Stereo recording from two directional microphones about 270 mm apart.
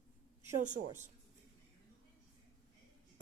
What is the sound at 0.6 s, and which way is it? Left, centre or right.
Speech, right.